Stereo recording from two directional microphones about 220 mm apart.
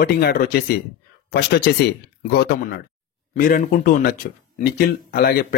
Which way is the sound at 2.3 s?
45° left (ahead or behind).